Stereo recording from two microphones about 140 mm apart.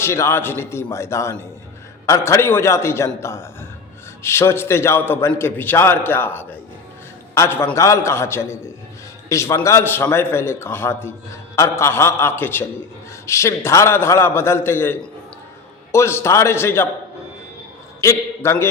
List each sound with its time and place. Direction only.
0.0 s a man's voice: 20° left (ahead or behind)
18.0 s a man's voice: 20° left (ahead or behind)